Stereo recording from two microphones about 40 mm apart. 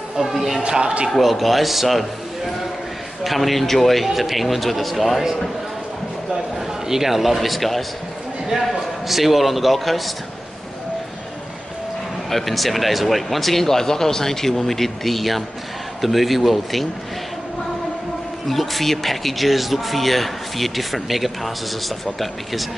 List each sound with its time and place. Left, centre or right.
0.2 s speech: centre
0.6 s a man's voice: right
1.1 s speech: centre
6.9 s speech: centre
12.3 s speech: centre
18.5 s speech: centre